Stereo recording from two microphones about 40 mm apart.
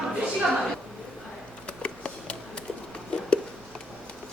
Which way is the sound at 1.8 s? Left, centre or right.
Left.